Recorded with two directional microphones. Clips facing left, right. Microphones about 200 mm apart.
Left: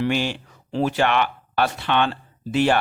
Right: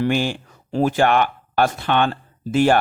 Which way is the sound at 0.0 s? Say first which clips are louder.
Right 2 dB; 50° right (ahead or behind).